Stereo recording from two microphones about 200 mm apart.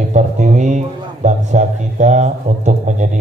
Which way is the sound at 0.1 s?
35° right (ahead or behind).